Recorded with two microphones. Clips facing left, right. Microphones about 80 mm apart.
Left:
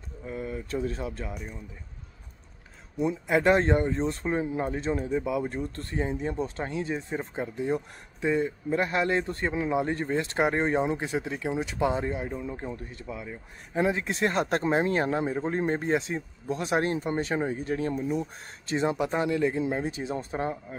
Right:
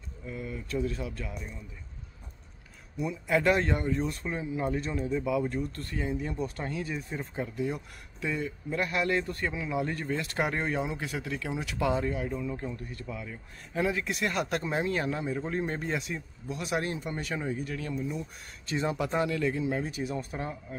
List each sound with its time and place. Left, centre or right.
0.3 s speech: left
3.0 s speech: left